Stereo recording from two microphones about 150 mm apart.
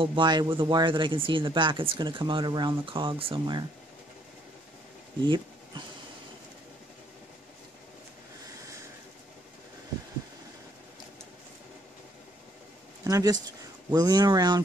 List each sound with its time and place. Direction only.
0.0 s speech: 30° right (ahead or behind)
5.2 s speech: 30° right (ahead or behind)
13.0 s speech: 25° right (ahead or behind)